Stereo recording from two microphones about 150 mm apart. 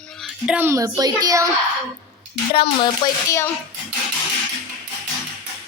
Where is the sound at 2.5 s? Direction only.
40° left (ahead or behind).